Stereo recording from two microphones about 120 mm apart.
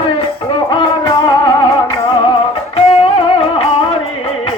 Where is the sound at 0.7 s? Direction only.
40° left (ahead or behind).